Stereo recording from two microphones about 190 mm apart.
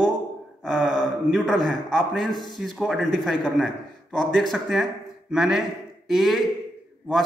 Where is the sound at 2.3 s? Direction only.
20° left (ahead or behind).